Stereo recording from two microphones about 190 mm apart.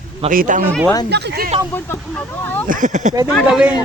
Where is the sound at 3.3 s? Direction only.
5° right (ahead or behind).